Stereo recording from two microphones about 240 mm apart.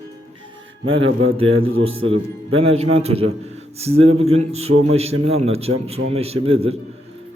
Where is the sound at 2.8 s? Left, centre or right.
Right.